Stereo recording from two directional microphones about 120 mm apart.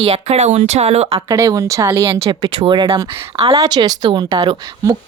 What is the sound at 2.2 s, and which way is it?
A woman's voice, 45° right (ahead or behind).